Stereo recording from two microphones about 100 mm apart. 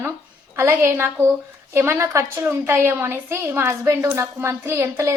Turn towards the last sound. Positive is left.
turn(degrees=-30)  # may be behind; listen again after turning